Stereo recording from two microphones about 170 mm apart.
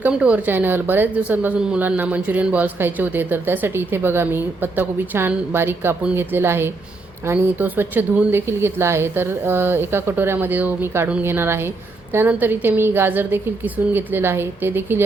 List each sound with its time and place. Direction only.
0.0 s speech: 5° right (ahead or behind)